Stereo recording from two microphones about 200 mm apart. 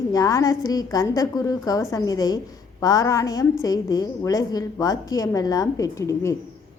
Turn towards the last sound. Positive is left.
turn(degrees=15)  # may be behind; listen again after turning